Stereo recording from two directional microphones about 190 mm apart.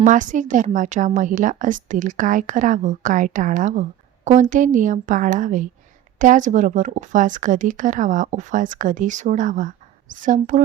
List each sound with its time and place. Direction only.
0.0 s a woman's voice: 40° right (ahead or behind)